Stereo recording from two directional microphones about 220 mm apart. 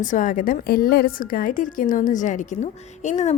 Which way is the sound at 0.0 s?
35° left (ahead or behind).